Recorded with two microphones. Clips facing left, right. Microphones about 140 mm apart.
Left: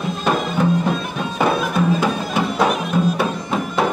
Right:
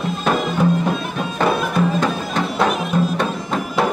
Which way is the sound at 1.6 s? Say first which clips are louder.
Even; 5° left (ahead or behind).